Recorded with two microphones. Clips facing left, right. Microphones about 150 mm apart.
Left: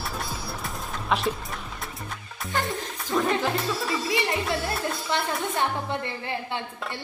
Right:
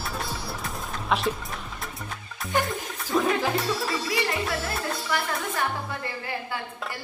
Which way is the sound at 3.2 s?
Centre (ahead or behind).